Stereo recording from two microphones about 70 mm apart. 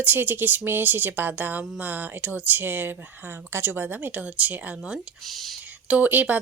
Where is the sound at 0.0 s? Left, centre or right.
Right.